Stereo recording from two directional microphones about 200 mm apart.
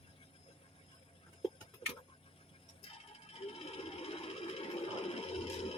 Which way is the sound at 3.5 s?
30° left (ahead or behind).